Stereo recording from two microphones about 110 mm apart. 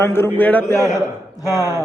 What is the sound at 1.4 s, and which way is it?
Speech, 30° left (ahead or behind).